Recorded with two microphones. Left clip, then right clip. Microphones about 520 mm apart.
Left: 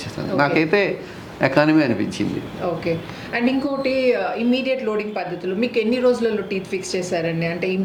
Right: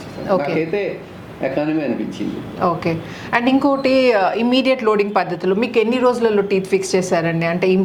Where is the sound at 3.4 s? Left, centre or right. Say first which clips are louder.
Right 6 dB; right.